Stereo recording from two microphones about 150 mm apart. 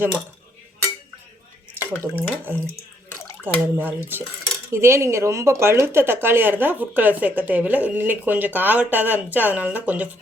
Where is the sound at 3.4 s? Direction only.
15° right (ahead or behind).